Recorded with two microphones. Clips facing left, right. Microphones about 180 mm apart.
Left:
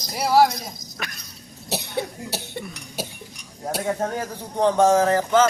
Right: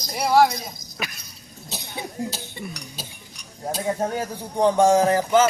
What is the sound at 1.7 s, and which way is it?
Cough, 70° left (ahead or behind).